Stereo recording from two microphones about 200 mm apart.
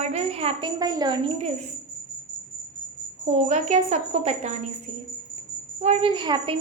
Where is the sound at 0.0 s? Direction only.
30° right (ahead or behind).